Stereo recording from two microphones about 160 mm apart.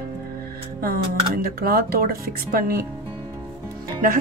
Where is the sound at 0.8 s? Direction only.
70° right (ahead or behind).